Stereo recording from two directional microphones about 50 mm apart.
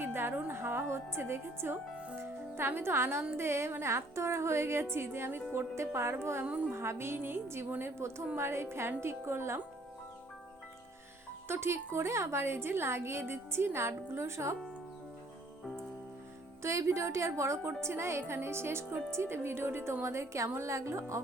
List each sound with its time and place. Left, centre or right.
0.0 s music: right
2.1 s a woman's voice: right
6.4 s a woman's voice: right
6.7 s a woman's voice: right
11.4 s a woman's voice: right
16.6 s a woman's voice: right
17.7 s a woman's voice: right